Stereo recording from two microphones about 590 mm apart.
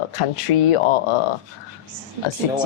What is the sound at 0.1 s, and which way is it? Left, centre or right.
Speech, left.